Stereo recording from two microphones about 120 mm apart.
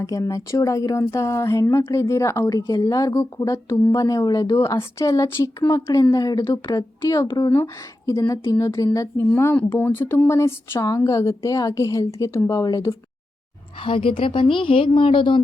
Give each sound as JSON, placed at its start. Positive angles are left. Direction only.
{"t": 0.0, "sound": "speech", "side_deg": 30}
{"t": 7.5, "sound": "speech", "side_deg": 25}
{"t": 13.8, "sound": "a woman's voice", "side_deg": 45}